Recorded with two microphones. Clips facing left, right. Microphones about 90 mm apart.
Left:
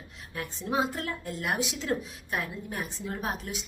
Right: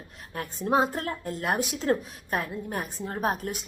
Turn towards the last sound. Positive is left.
turn(degrees=-45)  # may be behind; listen again after turning